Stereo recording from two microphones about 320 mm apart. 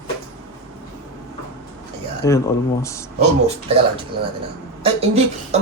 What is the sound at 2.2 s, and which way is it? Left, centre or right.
Speech, centre.